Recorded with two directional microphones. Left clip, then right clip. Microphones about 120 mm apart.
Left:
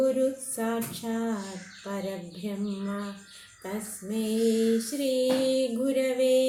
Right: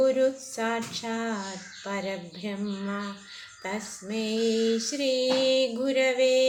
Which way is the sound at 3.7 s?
35° right (ahead or behind).